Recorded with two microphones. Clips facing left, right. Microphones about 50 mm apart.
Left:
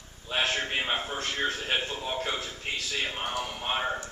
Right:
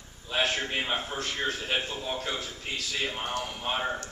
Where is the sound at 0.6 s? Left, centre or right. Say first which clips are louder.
Left 1 dB; centre.